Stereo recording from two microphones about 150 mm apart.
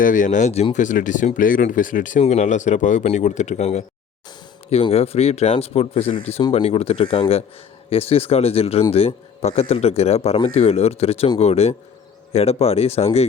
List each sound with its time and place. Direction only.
0.0 s speech: 60° left (ahead or behind); by 13.2 s 45° left (ahead or behind)